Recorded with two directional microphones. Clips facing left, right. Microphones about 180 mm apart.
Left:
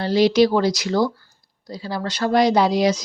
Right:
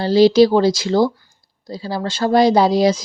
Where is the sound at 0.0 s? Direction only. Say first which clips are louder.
Right 5 dB; 30° right (ahead or behind).